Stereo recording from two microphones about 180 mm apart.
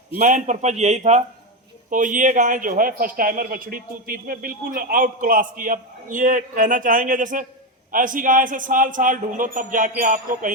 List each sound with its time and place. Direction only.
0.2 s a man's voice: 45° right (ahead or behind)